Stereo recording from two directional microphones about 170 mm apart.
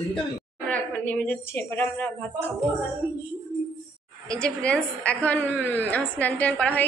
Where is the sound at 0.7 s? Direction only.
5° left (ahead or behind).